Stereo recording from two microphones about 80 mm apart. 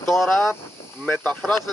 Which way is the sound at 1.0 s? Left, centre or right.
Centre.